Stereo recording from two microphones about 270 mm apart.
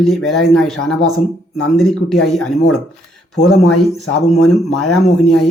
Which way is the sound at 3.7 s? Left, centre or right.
Left.